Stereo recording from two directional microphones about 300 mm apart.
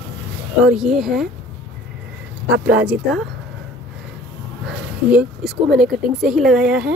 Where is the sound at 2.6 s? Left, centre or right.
Centre.